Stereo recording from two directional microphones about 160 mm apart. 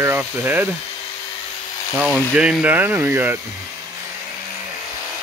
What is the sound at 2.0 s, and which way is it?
Speech, 5° right (ahead or behind).